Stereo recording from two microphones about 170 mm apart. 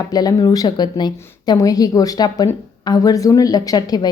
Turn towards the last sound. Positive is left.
turn(degrees=25)  # may be behind; listen again after turning